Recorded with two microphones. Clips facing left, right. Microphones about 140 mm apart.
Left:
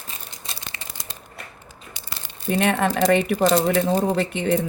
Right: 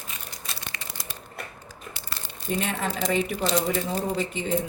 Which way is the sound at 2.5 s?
70° left (ahead or behind).